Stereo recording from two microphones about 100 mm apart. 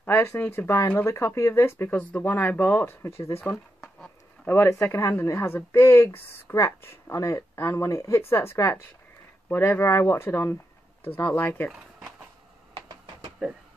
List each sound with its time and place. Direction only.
0.0 s speech: 25° left (ahead or behind)
12.7 s a sound: 50° right (ahead or behind)
13.4 s speech: centre (ahead or behind)